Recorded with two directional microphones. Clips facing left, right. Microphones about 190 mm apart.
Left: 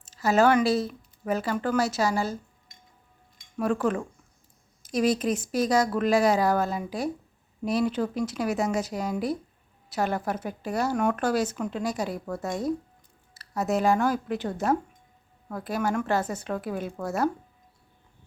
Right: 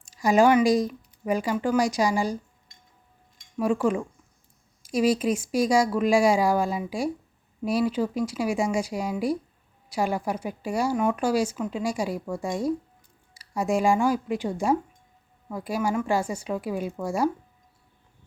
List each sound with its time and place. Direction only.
0.0 s speech: 15° right (ahead or behind)
3.6 s speech: 10° right (ahead or behind)